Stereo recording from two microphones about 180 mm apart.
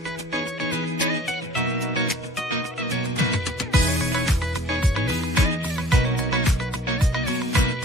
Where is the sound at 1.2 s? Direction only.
Centre (ahead or behind).